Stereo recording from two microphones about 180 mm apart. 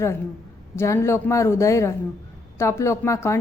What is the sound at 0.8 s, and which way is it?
A woman's voice, 15° left (ahead or behind).